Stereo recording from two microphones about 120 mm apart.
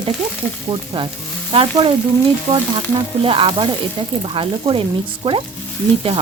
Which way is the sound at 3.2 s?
50° right (ahead or behind).